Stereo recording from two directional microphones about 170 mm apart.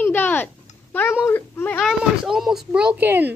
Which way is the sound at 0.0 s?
10° left (ahead or behind).